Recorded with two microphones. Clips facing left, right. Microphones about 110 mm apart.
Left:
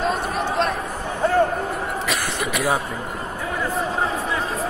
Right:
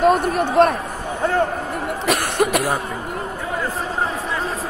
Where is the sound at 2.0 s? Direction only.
55° right (ahead or behind).